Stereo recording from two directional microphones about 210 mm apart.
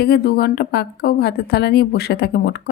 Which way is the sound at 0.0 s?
50° left (ahead or behind).